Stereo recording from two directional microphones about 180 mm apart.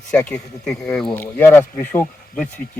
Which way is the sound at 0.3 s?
5° left (ahead or behind).